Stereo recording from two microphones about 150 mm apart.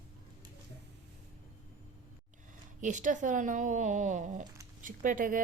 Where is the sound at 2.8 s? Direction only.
55° right (ahead or behind).